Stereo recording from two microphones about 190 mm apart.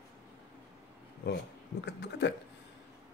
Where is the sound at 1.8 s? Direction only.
65° left (ahead or behind).